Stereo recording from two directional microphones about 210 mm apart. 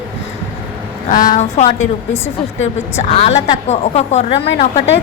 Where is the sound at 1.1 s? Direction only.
40° left (ahead or behind).